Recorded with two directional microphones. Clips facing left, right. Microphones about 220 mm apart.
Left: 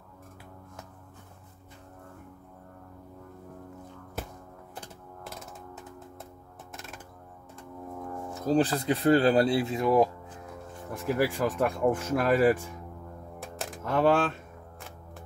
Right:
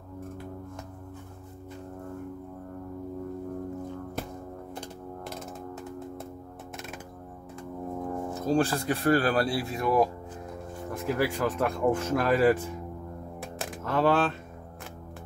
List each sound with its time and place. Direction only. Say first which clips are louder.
7.9 s music: right 5 dB; 25° right (ahead or behind)
8.5 s speech: left 1 dB; 20° left (ahead or behind)
11.1 s speech: left 1 dB; 10° left (ahead or behind)
13.4 s music: even; centre (ahead or behind)
13.9 s speech: left 1 dB; 10° left (ahead or behind)